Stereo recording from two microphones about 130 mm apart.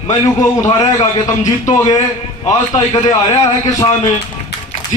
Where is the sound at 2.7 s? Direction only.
35° left (ahead or behind).